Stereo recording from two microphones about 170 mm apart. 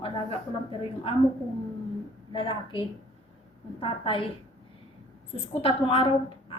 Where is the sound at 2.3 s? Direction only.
30° left (ahead or behind).